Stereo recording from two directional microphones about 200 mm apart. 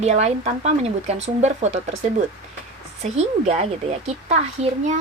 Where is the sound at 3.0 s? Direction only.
35° right (ahead or behind).